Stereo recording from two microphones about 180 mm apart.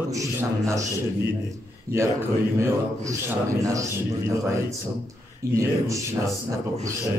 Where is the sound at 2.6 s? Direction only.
15° right (ahead or behind).